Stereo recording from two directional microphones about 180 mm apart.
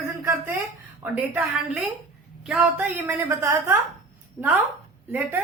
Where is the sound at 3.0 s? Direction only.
15° right (ahead or behind).